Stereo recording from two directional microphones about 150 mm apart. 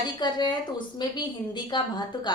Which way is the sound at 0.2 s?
30° left (ahead or behind).